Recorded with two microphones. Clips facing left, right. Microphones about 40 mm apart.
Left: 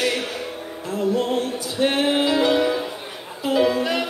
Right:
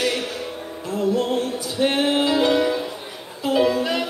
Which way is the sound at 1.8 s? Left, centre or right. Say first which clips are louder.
Even; centre.